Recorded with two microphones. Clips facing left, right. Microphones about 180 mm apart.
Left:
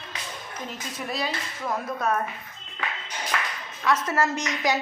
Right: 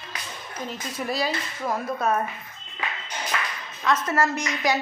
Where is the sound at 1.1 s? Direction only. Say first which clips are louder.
Right 3 dB; centre (ahead or behind).